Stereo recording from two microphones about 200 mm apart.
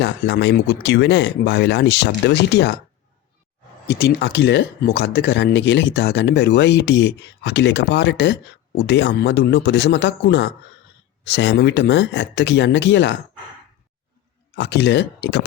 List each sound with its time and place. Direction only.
0.0 s speech: 60° left (ahead or behind)
3.8 s speech: 55° left (ahead or behind)
14.5 s speech: 55° left (ahead or behind)